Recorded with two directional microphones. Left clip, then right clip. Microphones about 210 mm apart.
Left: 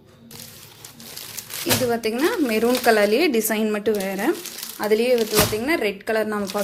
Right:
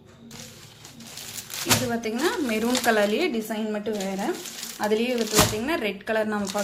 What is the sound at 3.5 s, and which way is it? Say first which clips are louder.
Speech: left 7 dB; 40° left (ahead or behind).